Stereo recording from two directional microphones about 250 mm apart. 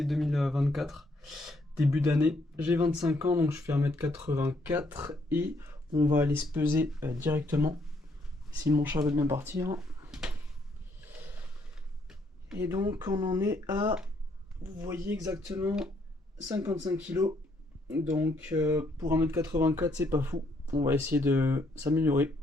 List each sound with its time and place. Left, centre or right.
0.0 s speech: centre
1.9 s speech: centre
12.0 s speech: centre